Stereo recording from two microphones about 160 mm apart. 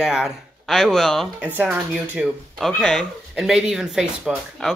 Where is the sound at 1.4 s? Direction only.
10° right (ahead or behind).